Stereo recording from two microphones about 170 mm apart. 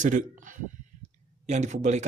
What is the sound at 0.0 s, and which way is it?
Speech, 50° right (ahead or behind).